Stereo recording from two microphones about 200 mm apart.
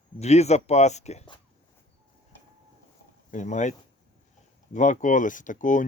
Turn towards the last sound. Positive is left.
turn(degrees=40)  # may be behind; listen again after turning